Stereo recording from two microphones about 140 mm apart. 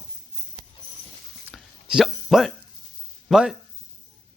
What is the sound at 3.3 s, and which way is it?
Speech, 5° right (ahead or behind).